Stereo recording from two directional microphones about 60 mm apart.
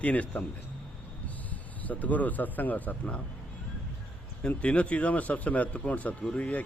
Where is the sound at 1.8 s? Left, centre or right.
Left.